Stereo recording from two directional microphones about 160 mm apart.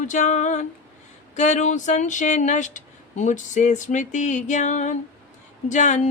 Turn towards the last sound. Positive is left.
turn(degrees=50)  # may be behind; listen again after turning